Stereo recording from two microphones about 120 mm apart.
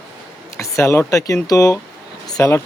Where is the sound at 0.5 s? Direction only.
25° left (ahead or behind).